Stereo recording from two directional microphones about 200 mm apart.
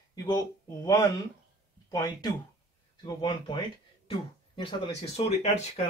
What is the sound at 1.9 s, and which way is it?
Speech, 20° left (ahead or behind).